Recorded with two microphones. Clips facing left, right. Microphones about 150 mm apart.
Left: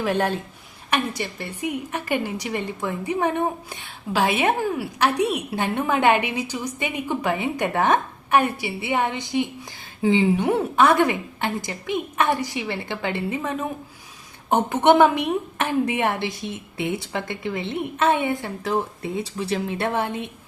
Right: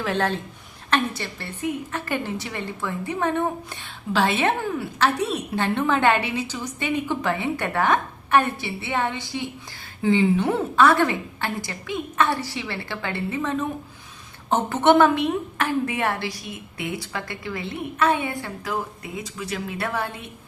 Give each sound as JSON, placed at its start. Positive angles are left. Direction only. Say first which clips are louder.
{"t": 0.0, "sound": "a woman's voice", "louder": "left 2 dB", "side_deg": 15}